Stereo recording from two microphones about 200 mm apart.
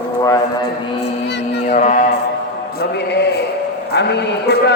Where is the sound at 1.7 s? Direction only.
40° left (ahead or behind).